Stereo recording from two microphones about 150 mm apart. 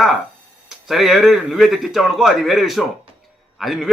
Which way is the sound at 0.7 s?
Centre (ahead or behind).